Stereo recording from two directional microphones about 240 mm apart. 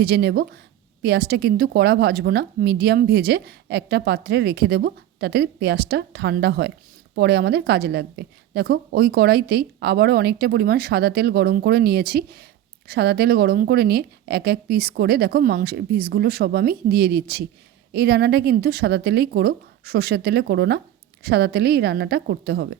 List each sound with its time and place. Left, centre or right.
0.0 s a woman's voice: right